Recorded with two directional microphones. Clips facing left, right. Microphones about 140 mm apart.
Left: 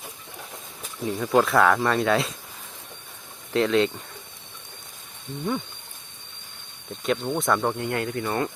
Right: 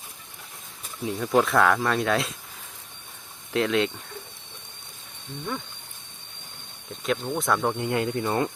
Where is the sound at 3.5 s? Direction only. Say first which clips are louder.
Left 3 dB; centre (ahead or behind).